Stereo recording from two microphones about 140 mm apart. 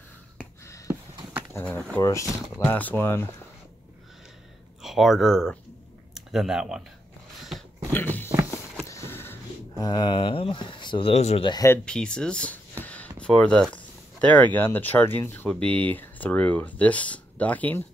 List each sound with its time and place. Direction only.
1.5 s speech: 15° left (ahead or behind)
4.8 s speech: centre (ahead or behind)
7.9 s a sound: 15° left (ahead or behind)
9.8 s speech: 35° left (ahead or behind)
11.8 s speech: 5° left (ahead or behind)
12.8 s a sound: 10° left (ahead or behind)
13.2 s speech: 5° left (ahead or behind)